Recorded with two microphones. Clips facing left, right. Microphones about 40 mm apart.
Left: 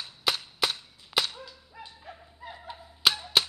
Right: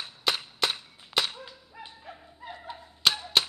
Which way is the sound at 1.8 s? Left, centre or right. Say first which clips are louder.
Even; centre.